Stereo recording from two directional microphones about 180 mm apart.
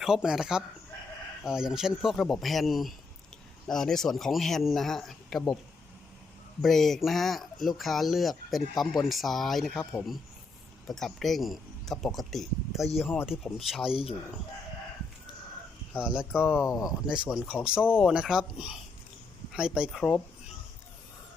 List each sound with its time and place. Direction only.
0.0 s speech: 5° right (ahead or behind)
6.6 s speech: centre (ahead or behind)
10.8 s speech: centre (ahead or behind)
13.9 s speech: 30° left (ahead or behind)
16.0 s speech: 5° right (ahead or behind)
16.6 s speech: 20° left (ahead or behind)
17.1 s speech: 5° right (ahead or behind)